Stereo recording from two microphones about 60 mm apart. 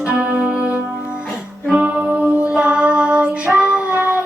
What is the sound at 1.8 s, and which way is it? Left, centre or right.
Music, right.